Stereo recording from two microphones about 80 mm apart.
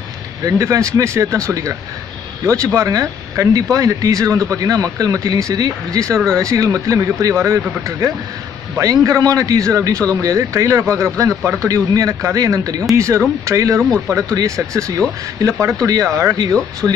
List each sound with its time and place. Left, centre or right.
0.5 s a man's voice: right
11.6 s a man's voice: right
16.8 s speech: centre